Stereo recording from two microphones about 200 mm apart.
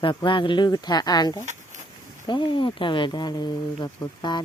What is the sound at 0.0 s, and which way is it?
Speech, 25° left (ahead or behind).